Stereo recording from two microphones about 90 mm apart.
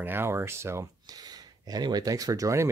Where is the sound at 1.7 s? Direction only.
50° right (ahead or behind).